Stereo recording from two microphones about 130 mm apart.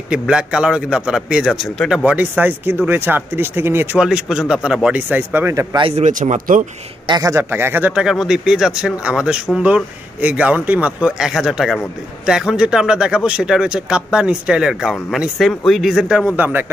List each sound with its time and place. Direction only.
0.1 s speech: 5° right (ahead or behind)
2.0 s speech: 10° right (ahead or behind)
5.8 s speech: 45° right (ahead or behind)
6.0 s speech: 70° right (ahead or behind)
7.1 s speech: 25° right (ahead or behind)